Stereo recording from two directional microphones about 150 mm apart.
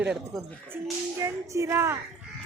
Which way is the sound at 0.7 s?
20° right (ahead or behind).